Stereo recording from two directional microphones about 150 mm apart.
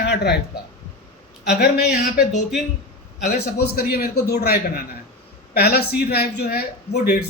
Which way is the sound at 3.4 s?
90° left.